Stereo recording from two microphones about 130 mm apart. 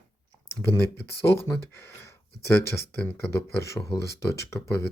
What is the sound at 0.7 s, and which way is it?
Speech, 20° left (ahead or behind).